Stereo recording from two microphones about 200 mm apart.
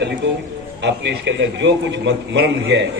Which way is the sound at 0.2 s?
60° right (ahead or behind).